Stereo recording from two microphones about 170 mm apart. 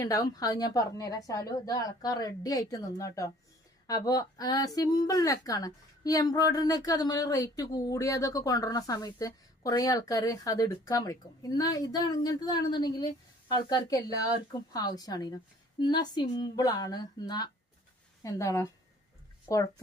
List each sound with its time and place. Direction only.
0.0 s a woman's voice: 20° left (ahead or behind)